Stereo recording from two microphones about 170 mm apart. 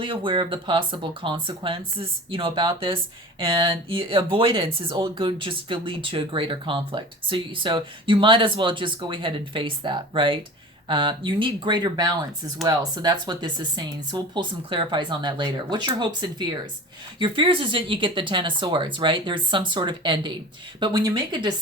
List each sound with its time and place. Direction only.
0.0 s speech: 30° right (ahead or behind)